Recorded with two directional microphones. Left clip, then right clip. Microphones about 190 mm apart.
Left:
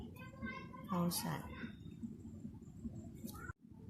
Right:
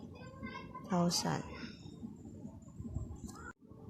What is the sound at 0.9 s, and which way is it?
Speech, 40° right (ahead or behind).